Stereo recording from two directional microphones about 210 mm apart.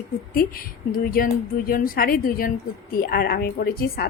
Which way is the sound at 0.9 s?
45° left (ahead or behind).